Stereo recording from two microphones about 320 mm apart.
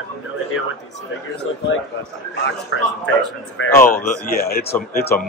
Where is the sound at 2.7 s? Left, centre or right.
Left.